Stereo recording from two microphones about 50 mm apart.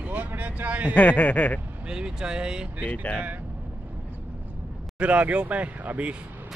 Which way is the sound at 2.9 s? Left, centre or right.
Left.